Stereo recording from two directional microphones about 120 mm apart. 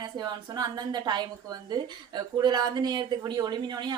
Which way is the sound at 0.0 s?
35° right (ahead or behind).